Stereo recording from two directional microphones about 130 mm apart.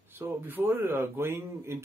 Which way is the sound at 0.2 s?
15° right (ahead or behind).